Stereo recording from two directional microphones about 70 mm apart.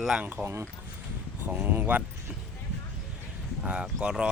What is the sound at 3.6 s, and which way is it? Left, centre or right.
Speech, centre.